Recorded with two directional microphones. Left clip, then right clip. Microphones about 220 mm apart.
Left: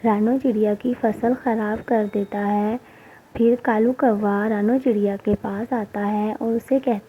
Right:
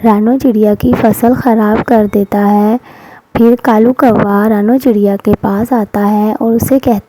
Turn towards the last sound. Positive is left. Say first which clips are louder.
# right 11 dB
turn(degrees=-50)  # may be behind; listen again after turning